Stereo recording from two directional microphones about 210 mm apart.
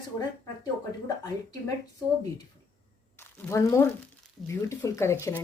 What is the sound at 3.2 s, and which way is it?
Speech, 10° left (ahead or behind).